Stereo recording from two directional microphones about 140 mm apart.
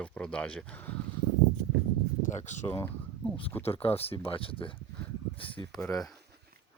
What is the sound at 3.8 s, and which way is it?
Speech, 45° left (ahead or behind).